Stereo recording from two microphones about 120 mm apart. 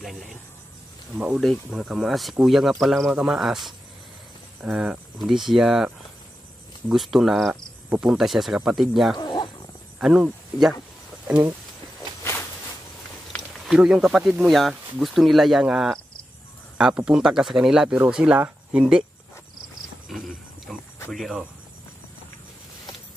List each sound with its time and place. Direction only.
0.0 s speech: centre (ahead or behind)
6.9 s speech: 5° right (ahead or behind)
9.2 s dog: 40° left (ahead or behind)
9.9 s speech: 5° right (ahead or behind)
12.2 s a sound: 20° left (ahead or behind)
13.7 s speech: 5° right (ahead or behind)
20.7 s a sound: 5° left (ahead or behind)
21.1 s speech: centre (ahead or behind)